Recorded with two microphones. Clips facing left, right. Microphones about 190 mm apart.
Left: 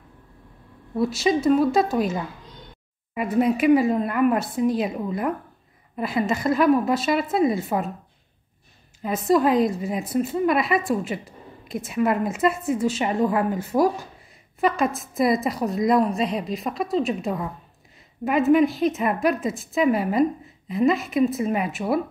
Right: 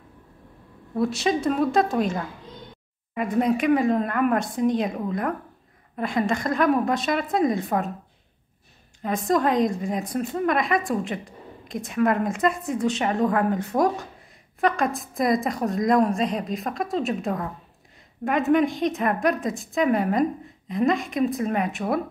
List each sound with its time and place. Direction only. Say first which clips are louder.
0.9 s a woman's voice: left 2 dB; centre (ahead or behind)
9.0 s a woman's voice: left 3 dB; 5° left (ahead or behind)